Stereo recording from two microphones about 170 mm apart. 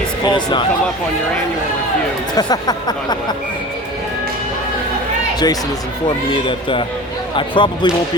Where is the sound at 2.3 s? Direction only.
25° left (ahead or behind).